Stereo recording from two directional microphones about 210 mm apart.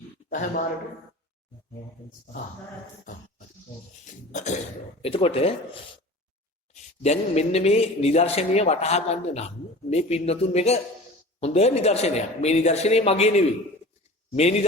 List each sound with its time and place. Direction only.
0.3 s a man's voice: 35° left (ahead or behind)
4.3 s speech: 35° left (ahead or behind)
7.0 s speech: 30° left (ahead or behind)
14.3 s speech: 30° left (ahead or behind)